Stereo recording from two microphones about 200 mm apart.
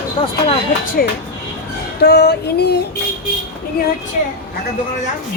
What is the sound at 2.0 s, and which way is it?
Female singing, 55° left (ahead or behind).